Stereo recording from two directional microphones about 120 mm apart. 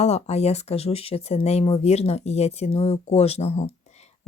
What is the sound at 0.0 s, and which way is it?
Speech, 65° left (ahead or behind).